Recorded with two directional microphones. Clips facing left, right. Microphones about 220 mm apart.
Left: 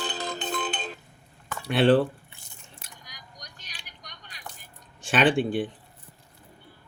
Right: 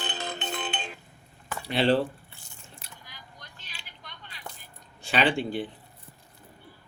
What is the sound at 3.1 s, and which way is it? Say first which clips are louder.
Vehicle: left 1 dB; 40° left (ahead or behind).